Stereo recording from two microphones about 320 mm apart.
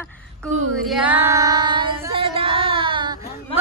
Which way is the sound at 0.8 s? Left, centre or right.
Centre.